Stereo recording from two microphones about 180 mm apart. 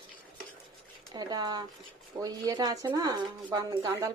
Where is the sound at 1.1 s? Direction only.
20° right (ahead or behind).